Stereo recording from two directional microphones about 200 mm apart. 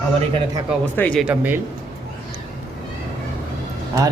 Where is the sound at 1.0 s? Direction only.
5° left (ahead or behind).